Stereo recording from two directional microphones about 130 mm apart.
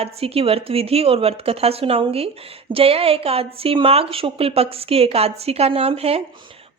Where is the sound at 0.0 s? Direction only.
50° right (ahead or behind).